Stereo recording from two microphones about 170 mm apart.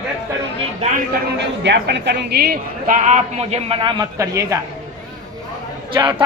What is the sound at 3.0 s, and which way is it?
Speech, 45° right (ahead or behind).